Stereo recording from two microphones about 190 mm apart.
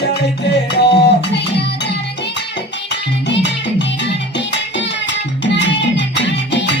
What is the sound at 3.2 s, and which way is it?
Music, 65° left (ahead or behind).